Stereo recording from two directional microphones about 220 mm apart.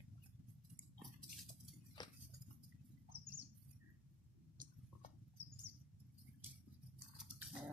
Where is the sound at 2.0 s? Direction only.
20° left (ahead or behind).